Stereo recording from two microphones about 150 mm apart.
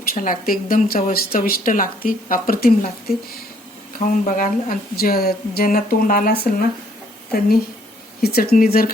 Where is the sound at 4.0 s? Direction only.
60° left (ahead or behind).